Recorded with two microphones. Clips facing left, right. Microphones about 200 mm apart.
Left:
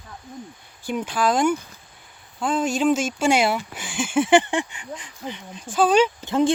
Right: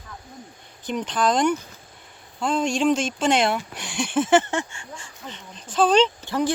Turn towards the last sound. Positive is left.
turn(degrees=20)  # may be behind; listen again after turning